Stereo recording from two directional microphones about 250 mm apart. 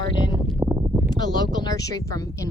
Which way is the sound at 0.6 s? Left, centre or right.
Centre.